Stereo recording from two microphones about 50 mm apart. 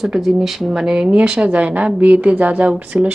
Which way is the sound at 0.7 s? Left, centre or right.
Centre.